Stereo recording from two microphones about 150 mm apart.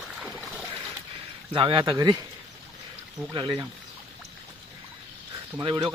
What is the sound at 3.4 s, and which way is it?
Speech, 30° right (ahead or behind).